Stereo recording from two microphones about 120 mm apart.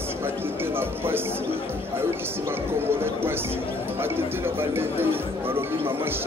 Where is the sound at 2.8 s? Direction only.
20° right (ahead or behind).